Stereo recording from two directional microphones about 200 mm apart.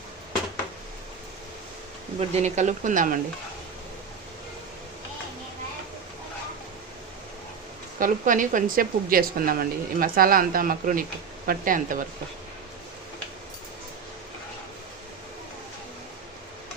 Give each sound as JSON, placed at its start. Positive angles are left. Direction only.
{"t": 2.1, "sound": "speech", "side_deg": -35}
{"t": 7.9, "sound": "a woman's voice", "side_deg": -40}